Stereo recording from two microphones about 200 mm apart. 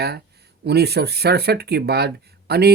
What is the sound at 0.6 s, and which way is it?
Speech, 55° right (ahead or behind).